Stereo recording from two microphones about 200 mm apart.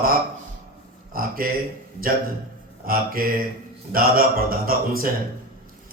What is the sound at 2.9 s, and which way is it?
Speech, 45° right (ahead or behind).